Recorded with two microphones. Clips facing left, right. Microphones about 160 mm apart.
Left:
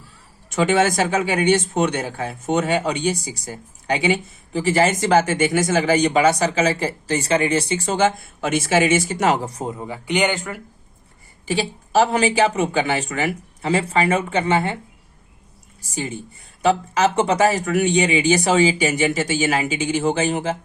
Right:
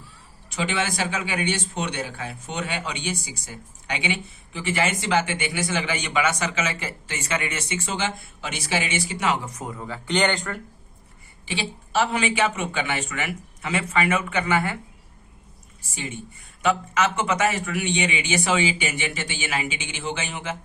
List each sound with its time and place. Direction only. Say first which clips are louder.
0.5 s speech: left 9 dB; 45° left (ahead or behind); by 10.6 s 10° left (ahead or behind)
11.4 s speech: left 7 dB; 40° left (ahead or behind)
15.8 s speech: left 6 dB; 40° left (ahead or behind)